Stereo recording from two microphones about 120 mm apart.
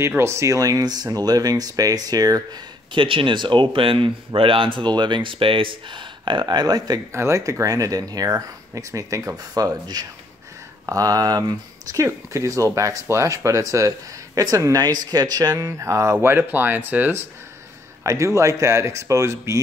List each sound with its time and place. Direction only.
0.0 s speech: 20° right (ahead or behind)